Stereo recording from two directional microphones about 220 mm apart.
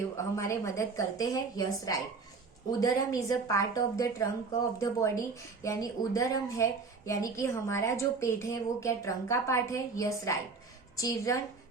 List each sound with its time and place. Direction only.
0.3 s a woman's voice: 15° left (ahead or behind)